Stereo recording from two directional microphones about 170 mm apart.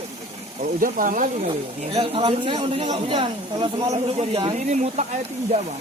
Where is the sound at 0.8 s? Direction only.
50° right (ahead or behind).